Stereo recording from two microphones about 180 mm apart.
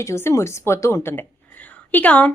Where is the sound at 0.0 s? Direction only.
15° left (ahead or behind).